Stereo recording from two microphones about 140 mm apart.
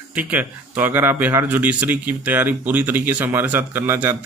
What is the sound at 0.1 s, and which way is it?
Speech, 10° right (ahead or behind).